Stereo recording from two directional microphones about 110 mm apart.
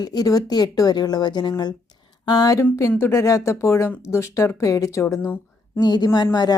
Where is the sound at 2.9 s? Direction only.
20° left (ahead or behind).